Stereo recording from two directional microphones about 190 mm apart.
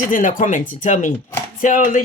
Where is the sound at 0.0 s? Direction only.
45° left (ahead or behind).